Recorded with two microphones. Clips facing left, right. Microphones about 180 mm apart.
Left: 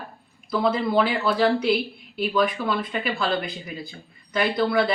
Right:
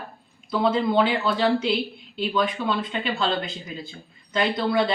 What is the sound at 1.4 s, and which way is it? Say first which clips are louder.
Speech: left 3 dB; 25° right (ahead or behind).